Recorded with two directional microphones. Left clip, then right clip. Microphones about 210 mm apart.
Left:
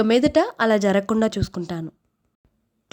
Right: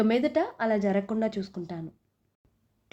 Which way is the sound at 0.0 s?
25° left (ahead or behind).